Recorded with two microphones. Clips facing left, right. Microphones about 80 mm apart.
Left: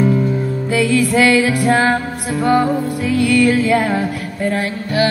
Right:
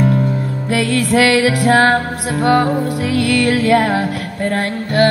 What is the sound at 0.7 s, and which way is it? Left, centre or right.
Music, right.